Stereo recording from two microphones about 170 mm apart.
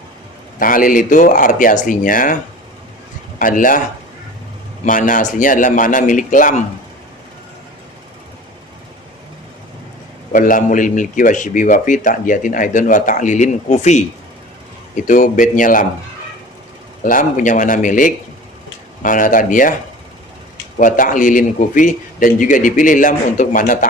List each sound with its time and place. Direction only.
0.6 s a man's voice: 55° left (ahead or behind)
4.9 s a man's voice: 50° left (ahead or behind)
10.3 s a man's voice: 50° left (ahead or behind)
15.0 s a man's voice: 50° left (ahead or behind)
17.0 s a man's voice: 50° left (ahead or behind)
20.7 s a man's voice: 50° left (ahead or behind)